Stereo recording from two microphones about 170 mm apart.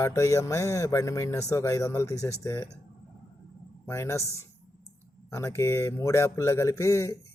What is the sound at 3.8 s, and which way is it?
Speech, 15° left (ahead or behind).